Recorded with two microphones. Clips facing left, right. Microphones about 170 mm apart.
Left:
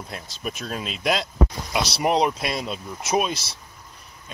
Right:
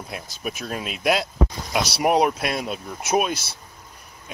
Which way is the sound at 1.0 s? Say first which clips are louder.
Right 2 dB; 5° right (ahead or behind).